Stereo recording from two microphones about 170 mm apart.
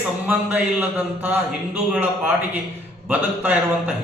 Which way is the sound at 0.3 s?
10° right (ahead or behind).